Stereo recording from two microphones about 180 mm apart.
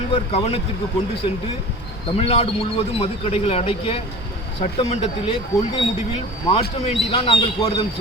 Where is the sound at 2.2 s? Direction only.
35° left (ahead or behind).